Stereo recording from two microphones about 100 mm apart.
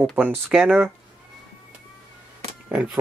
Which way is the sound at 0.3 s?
5° right (ahead or behind).